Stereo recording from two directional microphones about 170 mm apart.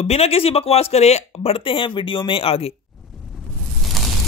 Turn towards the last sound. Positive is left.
turn(degrees=0)  # may be behind; listen again after turning